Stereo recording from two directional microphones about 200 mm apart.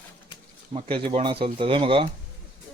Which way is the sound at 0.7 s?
25° right (ahead or behind).